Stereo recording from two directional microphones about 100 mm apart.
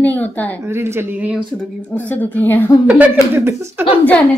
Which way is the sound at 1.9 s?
20° left (ahead or behind).